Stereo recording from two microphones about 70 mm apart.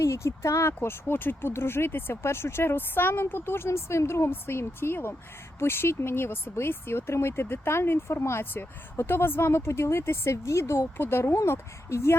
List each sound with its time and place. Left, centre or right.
0.0 s speech: left
0.7 s speech: left